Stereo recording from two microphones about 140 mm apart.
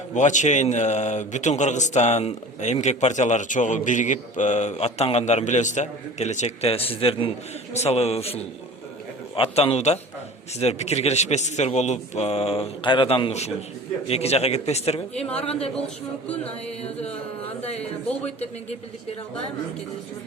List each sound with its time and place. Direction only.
0.1 s a man's voice: 60° left (ahead or behind)